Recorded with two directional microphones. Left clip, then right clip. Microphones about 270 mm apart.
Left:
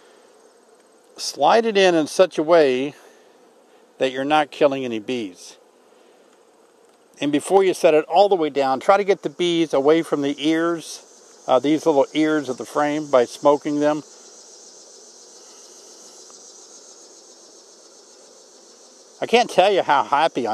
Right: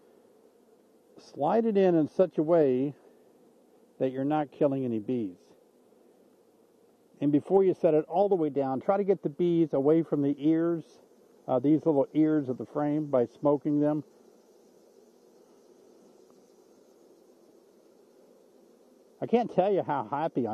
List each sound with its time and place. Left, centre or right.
1.1 s speech: centre
4.0 s speech: centre
7.2 s speech: centre
15.4 s insect: centre
19.1 s speech: centre